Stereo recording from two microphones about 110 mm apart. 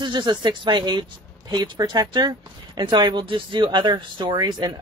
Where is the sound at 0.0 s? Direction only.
45° right (ahead or behind).